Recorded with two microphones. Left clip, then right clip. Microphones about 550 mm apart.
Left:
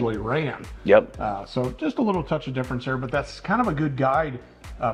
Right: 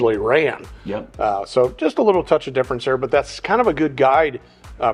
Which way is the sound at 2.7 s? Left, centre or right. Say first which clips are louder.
Right 7 dB; right.